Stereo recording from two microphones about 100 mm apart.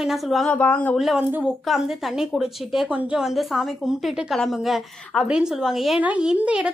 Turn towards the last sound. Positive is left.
turn(degrees=-10)  # may be behind; listen again after turning